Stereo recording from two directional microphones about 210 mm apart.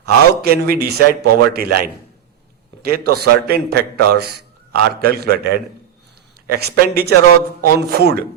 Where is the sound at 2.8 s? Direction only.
45° right (ahead or behind).